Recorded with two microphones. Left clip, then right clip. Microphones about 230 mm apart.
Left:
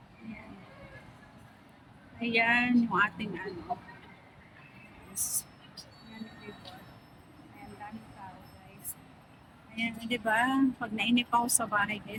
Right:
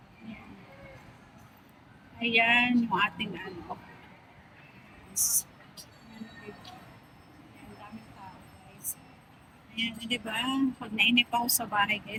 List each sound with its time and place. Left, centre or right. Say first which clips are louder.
2.1 s speech: right 3 dB; centre
5.1 s a sound: right 8 dB; centre
9.7 s speech: right 2 dB; centre